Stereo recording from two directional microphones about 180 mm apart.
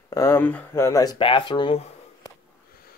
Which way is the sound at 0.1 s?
15° left (ahead or behind).